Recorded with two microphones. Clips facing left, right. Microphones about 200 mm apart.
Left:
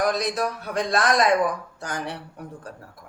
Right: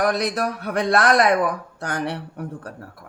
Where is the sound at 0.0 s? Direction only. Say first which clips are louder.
Right 2 dB; 60° right (ahead or behind).